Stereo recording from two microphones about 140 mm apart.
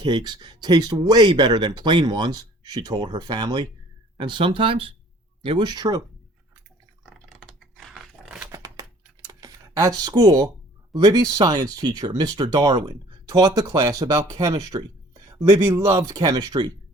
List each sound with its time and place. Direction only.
0.0 s speech: 30° right (ahead or behind)
7.0 s a sound: 5° left (ahead or behind)
8.5 s computer keyboard: 25° right (ahead or behind)
10.9 s speech: 30° right (ahead or behind)